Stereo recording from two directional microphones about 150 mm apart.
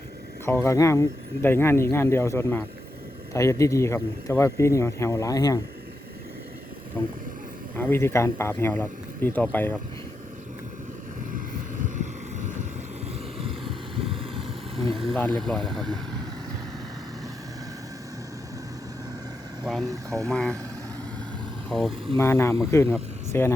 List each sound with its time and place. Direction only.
0.4 s speech: 15° left (ahead or behind)
7.0 s speech: 15° left (ahead or behind)
11.3 s vehicle: 55° right (ahead or behind)
13.1 s vehicle: 40° right (ahead or behind)
14.9 s speech: centre (ahead or behind)
19.8 s speech: 20° right (ahead or behind)
20.3 s speech: 5° left (ahead or behind)
21.7 s speech: centre (ahead or behind)
22.2 s speech: 20° left (ahead or behind)